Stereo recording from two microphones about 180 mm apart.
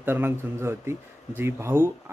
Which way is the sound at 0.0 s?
10° right (ahead or behind).